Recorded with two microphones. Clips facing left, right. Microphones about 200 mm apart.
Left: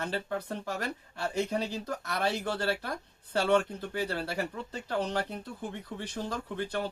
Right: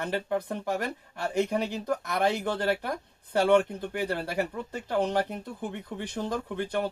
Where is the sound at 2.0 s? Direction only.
15° right (ahead or behind).